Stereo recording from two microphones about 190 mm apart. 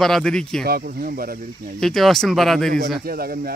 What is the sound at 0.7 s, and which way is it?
Speech, 55° right (ahead or behind).